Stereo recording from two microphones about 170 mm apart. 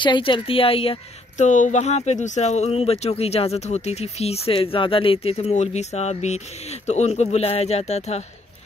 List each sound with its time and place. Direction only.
0.0 s speech: 30° left (ahead or behind)
1.4 s speech: 45° left (ahead or behind)